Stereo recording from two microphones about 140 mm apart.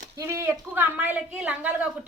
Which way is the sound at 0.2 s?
20° right (ahead or behind).